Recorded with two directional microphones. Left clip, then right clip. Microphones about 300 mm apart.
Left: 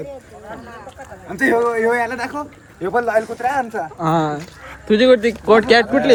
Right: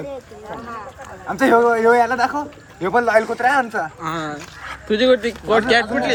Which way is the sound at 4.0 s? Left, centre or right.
Centre.